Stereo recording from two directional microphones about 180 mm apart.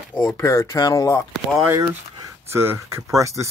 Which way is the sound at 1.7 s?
15° right (ahead or behind).